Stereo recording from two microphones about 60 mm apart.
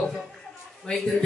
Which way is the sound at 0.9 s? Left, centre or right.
Centre.